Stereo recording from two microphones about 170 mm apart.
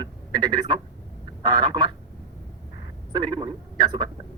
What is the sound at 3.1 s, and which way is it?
Speech, 25° right (ahead or behind).